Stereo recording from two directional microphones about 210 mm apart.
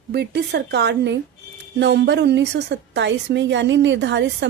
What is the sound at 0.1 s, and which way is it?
A woman's voice, 50° right (ahead or behind).